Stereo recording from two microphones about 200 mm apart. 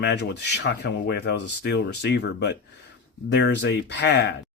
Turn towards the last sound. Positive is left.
turn(degrees=55)  # may be behind; listen again after turning